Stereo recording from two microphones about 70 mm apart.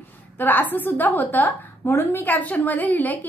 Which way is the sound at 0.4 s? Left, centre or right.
Left.